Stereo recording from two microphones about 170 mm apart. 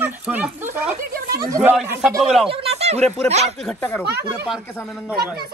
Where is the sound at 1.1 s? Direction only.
60° right (ahead or behind).